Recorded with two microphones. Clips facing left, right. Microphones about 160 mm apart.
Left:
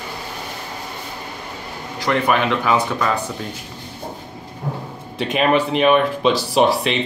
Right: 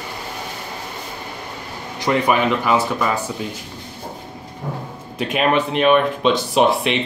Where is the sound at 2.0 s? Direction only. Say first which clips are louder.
Right 1 dB; 15° right (ahead or behind).